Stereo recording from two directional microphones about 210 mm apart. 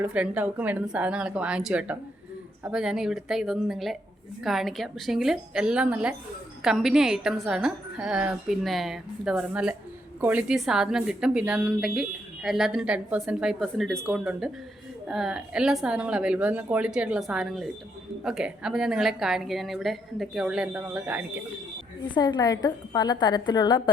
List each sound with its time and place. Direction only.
0.0 s a woman's voice: 5° right (ahead or behind)
22.0 s a woman's voice: 20° left (ahead or behind)